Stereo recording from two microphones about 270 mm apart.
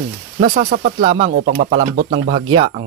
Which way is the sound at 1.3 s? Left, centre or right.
Right.